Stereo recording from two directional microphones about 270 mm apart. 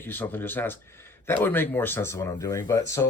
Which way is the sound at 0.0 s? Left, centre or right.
Centre.